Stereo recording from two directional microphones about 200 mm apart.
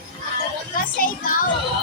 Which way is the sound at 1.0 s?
45° left (ahead or behind).